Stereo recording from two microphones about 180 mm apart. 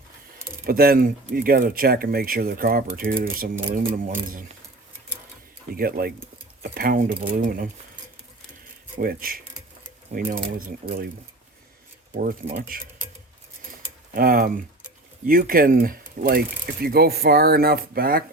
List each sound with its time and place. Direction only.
0.6 s speech: 55° right (ahead or behind)
5.7 s speech: 55° right (ahead or behind)
9.0 s speech: 55° right (ahead or behind)
12.1 s speech: 55° right (ahead or behind)
14.1 s speech: 55° right (ahead or behind)